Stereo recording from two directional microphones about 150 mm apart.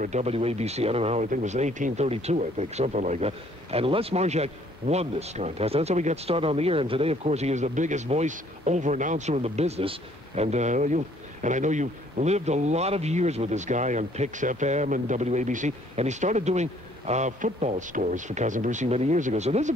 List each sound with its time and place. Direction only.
0.0 s speech: 50° right (ahead or behind)